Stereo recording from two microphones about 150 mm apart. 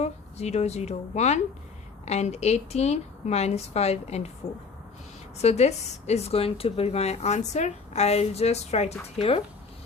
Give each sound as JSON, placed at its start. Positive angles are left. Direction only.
{"t": 0.0, "sound": "a woman's voice", "side_deg": 45}
{"t": 5.4, "sound": "a woman's voice", "side_deg": 45}